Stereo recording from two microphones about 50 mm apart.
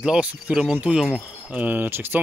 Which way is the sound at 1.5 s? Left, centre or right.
Right.